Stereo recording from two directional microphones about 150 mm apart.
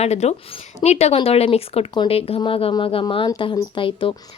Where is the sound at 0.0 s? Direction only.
45° left (ahead or behind).